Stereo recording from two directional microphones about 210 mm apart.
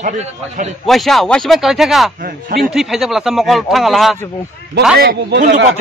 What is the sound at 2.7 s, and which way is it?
Speech, centre (ahead or behind).